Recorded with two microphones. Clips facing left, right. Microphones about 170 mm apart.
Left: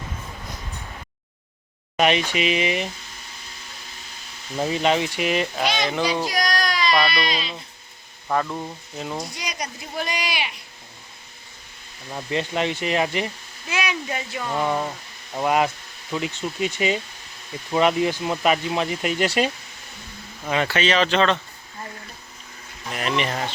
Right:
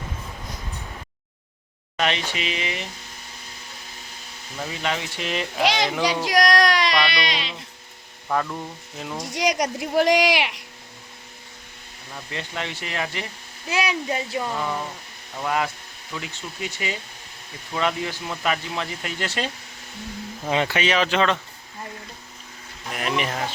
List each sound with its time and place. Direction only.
2.0 s speech: 15° left (ahead or behind)
4.5 s speech: 25° left (ahead or behind); by 5.6 s 5° left (ahead or behind)
5.6 s speech: 90° right
6.3 s baby cry: 85° right
8.3 s a sound: 5° left (ahead or behind)
9.3 s speech: 85° right
12.1 s speech: 20° left (ahead or behind)
13.7 s speech: 35° right (ahead or behind)
15.4 s speech: 20° left (ahead or behind)
20.4 s speech: 20° right (ahead or behind)
22.9 s a sound: 5° right (ahead or behind)